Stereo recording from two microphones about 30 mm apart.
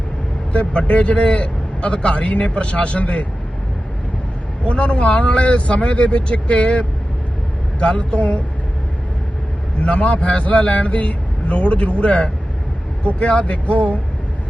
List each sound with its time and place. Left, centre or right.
0.5 s a man's voice: left
4.6 s a man's voice: left
6.3 s a man's voice: left
7.8 s speech: left
9.8 s a man's voice: left